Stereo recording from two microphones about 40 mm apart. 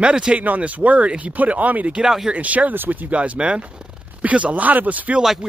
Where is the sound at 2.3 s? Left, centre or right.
Right.